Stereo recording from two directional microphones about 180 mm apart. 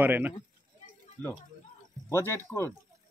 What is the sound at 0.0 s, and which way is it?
Speech, 10° right (ahead or behind).